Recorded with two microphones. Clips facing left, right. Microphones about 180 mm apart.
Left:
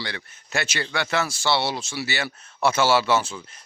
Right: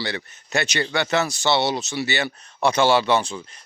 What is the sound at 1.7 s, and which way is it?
Speech, centre (ahead or behind).